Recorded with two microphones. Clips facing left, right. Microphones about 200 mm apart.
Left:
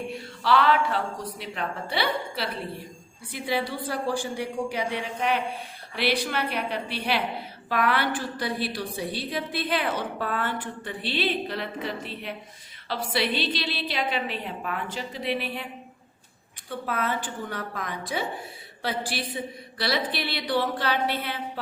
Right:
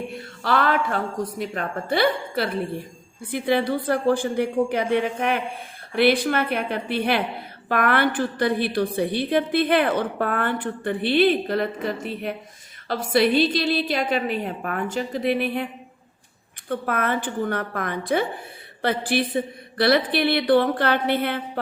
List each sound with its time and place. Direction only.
0.1 s a woman's voice: 50° right (ahead or behind)
16.6 s a woman's voice: 55° right (ahead or behind)